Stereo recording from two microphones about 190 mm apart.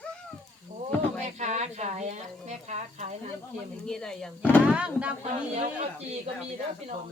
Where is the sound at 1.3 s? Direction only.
35° right (ahead or behind).